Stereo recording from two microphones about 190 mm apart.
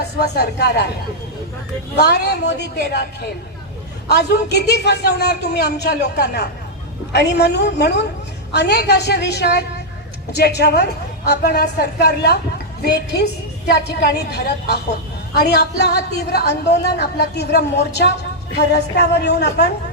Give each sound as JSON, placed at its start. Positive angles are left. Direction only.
{"t": 0.2, "sound": "a man's voice", "side_deg": 60}
{"t": 2.0, "sound": "a man's voice", "side_deg": 60}